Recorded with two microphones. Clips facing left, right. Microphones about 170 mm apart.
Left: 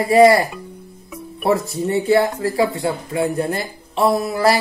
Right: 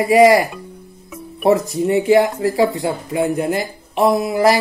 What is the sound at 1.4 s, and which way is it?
Speech, 20° right (ahead or behind).